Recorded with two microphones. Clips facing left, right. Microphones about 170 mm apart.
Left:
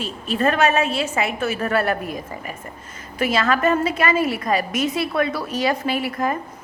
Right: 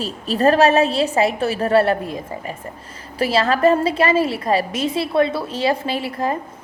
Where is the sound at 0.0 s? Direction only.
35° right (ahead or behind).